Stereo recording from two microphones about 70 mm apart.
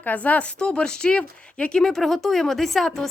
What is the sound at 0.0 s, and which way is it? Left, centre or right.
Speech, left.